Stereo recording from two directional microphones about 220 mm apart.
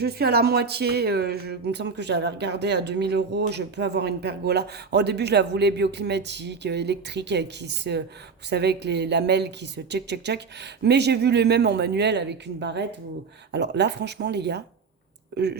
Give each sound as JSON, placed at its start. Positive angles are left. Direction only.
{"t": 0.0, "sound": "speech", "side_deg": -45}